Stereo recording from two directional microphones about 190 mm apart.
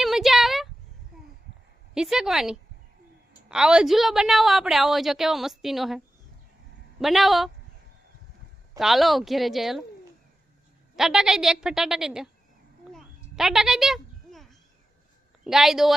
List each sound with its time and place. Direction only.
0.0 s a sound: centre (ahead or behind)
2.0 s a woman's voice: centre (ahead or behind)
7.0 s a woman's voice: centre (ahead or behind)
8.8 s a woman's voice: centre (ahead or behind)
10.9 s a woman's voice: centre (ahead or behind)
12.9 s a sound: centre (ahead or behind)
15.4 s a woman's voice: centre (ahead or behind)